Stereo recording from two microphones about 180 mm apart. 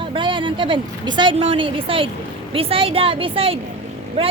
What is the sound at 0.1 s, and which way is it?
A woman's voice, 25° right (ahead or behind).